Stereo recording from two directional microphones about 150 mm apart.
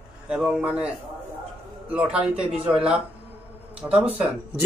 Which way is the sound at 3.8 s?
15° right (ahead or behind).